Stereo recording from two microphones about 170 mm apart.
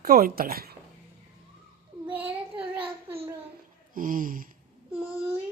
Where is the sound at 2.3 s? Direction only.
30° right (ahead or behind).